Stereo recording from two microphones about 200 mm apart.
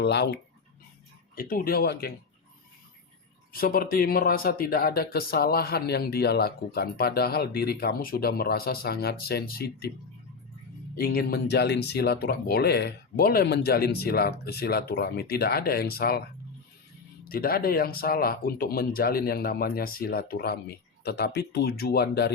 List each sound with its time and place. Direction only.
0.0 s speech: 55° left (ahead or behind)
1.4 s speech: 45° left (ahead or behind)
3.5 s speech: 45° left (ahead or behind)
10.9 s speech: 50° left (ahead or behind)
17.2 s speech: 50° left (ahead or behind)